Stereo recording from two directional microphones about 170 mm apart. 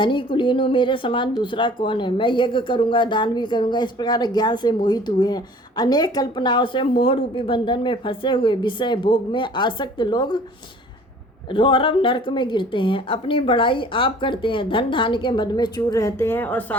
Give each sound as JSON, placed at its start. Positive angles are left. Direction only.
{"t": 0.0, "sound": "speech", "side_deg": 30}
{"t": 11.5, "sound": "speech", "side_deg": 30}